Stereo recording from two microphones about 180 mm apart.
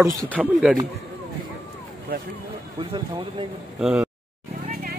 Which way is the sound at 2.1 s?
55° right (ahead or behind).